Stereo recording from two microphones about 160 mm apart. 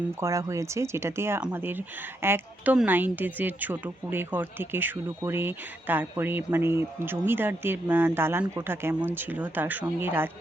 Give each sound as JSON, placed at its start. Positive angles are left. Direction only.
{"t": 0.2, "sound": "speech", "side_deg": -20}